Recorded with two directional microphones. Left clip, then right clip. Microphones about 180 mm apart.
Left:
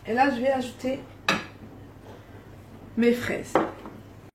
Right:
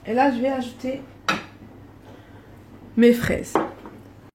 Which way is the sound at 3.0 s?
55° right (ahead or behind).